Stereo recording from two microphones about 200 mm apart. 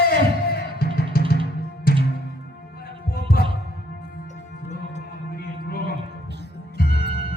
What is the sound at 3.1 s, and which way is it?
Music, 50° left (ahead or behind).